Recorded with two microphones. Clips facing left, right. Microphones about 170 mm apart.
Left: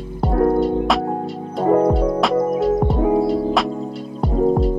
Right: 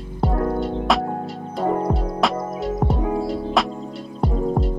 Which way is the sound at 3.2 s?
Centre (ahead or behind).